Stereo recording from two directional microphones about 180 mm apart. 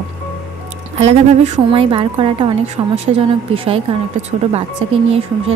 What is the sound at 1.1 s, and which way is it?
Speech, 35° right (ahead or behind).